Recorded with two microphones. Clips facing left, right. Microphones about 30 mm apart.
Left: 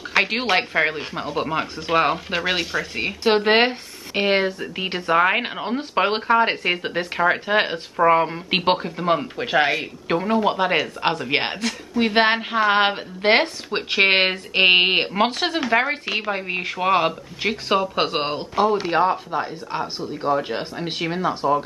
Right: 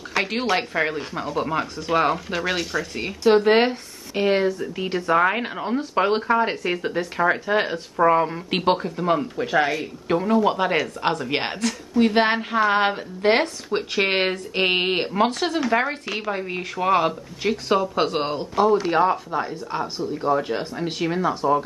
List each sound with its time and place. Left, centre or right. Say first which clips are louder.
0.1 s a woman's voice: left 3 dB; left
3.3 s a woman's voice: right 1 dB; left
10.0 s a woman's voice: right 1 dB; left